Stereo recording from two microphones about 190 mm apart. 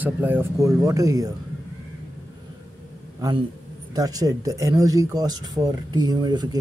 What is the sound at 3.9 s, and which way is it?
Speech, 20° right (ahead or behind).